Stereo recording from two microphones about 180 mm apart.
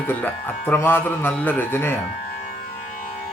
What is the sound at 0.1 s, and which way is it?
Speech, 10° left (ahead or behind).